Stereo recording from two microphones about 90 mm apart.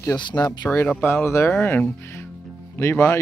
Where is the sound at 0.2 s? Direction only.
60° left (ahead or behind).